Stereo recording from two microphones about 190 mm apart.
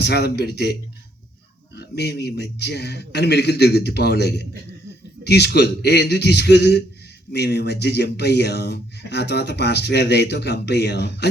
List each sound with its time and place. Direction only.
0.0 s speech: 60° left (ahead or behind)